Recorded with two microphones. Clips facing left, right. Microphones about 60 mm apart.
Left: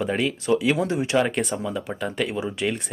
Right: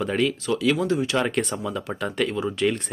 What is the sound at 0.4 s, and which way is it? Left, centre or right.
Speech, left.